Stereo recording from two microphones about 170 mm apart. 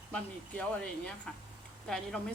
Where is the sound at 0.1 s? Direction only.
5° left (ahead or behind).